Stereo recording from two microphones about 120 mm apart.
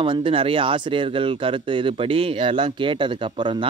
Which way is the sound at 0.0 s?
45° right (ahead or behind).